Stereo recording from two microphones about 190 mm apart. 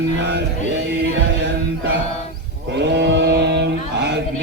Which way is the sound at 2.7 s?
65° right (ahead or behind).